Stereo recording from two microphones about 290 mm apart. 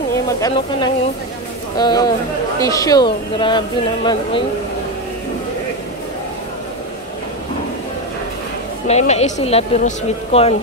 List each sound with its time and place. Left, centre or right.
0.1 s speech: centre
8.8 s speech: left